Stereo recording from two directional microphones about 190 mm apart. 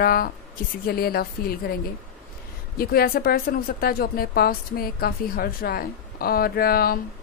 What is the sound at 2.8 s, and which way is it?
A woman's voice, 55° left (ahead or behind).